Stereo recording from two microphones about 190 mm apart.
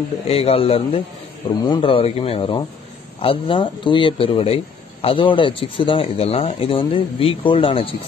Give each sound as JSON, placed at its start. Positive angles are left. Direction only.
{"t": 0.3, "sound": "speech", "side_deg": 30}